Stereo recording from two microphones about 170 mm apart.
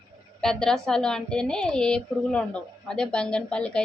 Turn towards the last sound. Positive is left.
turn(degrees=5)  # may be behind; listen again after turning